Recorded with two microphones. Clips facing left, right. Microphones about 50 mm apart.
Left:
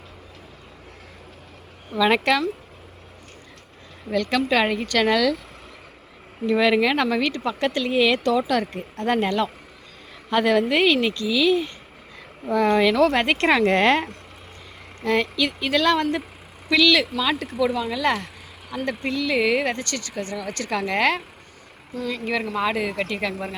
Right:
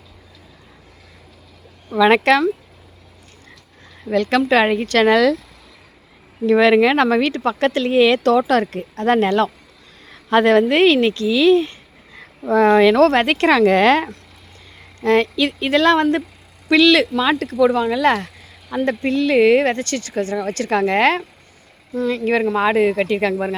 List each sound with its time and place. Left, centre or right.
2.0 s speech: right
4.1 s speech: right
6.5 s speech: right
12.5 s speech: right
12.9 s speech: right
15.0 s speech: right
15.8 s speech: right
16.7 s speech: right
17.3 s speech: right
18.7 s speech: right
19.1 s speech: right
21.9 s speech: right